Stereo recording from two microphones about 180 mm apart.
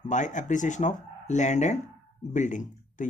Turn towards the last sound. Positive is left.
turn(degrees=45)  # may be behind; listen again after turning